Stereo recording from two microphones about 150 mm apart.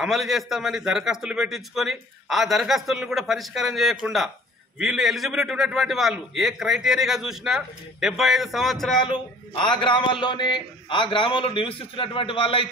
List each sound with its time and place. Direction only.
0.0 s a man's voice: centre (ahead or behind)
8.9 s a man's voice: 30° left (ahead or behind)